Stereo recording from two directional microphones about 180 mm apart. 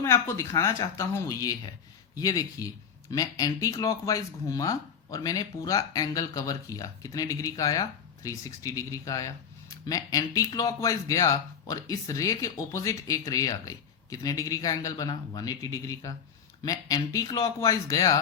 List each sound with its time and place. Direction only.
0.0 s a woman's voice: 15° left (ahead or behind)